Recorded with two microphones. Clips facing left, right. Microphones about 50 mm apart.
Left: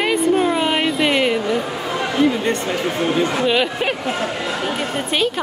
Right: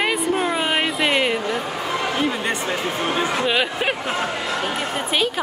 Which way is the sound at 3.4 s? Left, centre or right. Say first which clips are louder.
Left 3 dB; centre.